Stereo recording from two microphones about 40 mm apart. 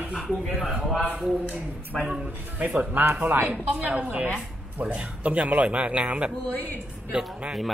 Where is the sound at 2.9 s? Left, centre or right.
Right.